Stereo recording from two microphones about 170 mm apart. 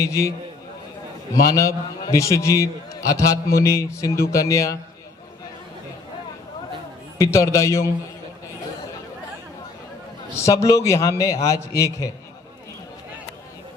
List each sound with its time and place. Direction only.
0.0 s a man's voice: 20° left (ahead or behind)
7.2 s a man's voice: 15° left (ahead or behind)
10.3 s a man's voice: 15° left (ahead or behind)